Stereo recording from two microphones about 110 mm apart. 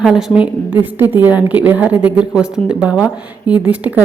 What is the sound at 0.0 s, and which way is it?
A woman's voice, 5° right (ahead or behind).